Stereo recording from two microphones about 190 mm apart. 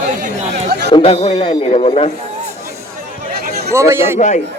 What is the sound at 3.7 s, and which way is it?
Speech, 15° right (ahead or behind).